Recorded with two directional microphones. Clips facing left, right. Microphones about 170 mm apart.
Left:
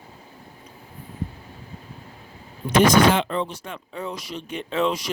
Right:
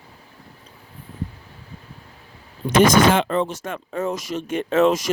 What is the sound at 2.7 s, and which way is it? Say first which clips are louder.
Speech: right 2 dB; 45° right (ahead or behind).